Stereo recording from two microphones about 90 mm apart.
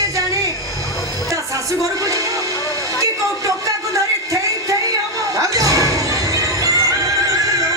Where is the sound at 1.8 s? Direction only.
40° right (ahead or behind).